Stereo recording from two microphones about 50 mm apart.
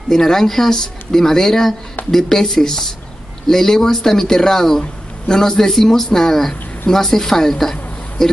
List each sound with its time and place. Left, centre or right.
0.1 s speech: centre